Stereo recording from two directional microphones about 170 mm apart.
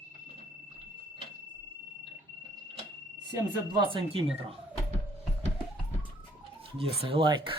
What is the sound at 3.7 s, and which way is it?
Speech, 30° right (ahead or behind).